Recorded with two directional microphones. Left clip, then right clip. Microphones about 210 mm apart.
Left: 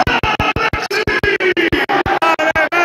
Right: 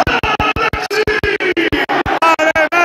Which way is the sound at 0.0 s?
15° right (ahead or behind).